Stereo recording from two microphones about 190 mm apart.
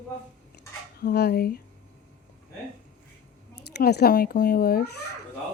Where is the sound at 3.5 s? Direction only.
60° left (ahead or behind).